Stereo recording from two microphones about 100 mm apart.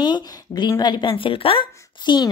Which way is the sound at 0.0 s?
50° left (ahead or behind).